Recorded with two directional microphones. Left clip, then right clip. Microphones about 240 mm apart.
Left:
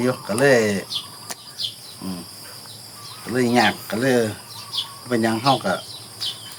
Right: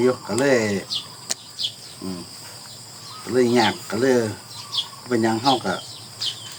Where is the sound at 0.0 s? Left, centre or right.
Left.